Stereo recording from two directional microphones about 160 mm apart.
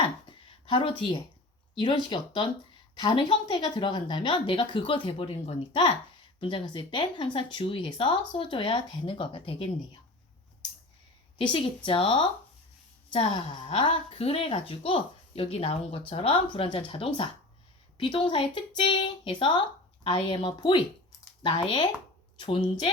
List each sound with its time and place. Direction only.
0.0 s a sound: 30° left (ahead or behind)
1.8 s a woman's voice: 30° left (ahead or behind)
11.9 s a woman's voice: 35° left (ahead or behind)